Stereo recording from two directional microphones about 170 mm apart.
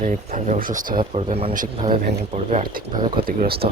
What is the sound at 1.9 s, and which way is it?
Speech, 60° right (ahead or behind).